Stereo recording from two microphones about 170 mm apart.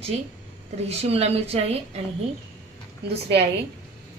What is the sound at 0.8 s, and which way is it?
Speech, 35° right (ahead or behind).